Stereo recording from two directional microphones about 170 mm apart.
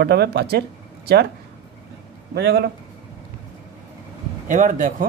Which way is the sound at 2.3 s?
70° right (ahead or behind).